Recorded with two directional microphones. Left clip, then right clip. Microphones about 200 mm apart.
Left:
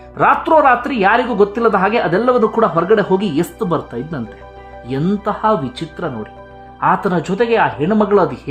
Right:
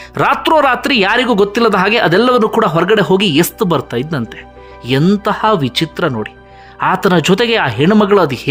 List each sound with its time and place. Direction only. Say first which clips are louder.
0.1 s speech: even; 25° right (ahead or behind)